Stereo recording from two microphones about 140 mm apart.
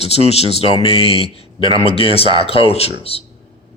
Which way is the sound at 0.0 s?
45° left (ahead or behind).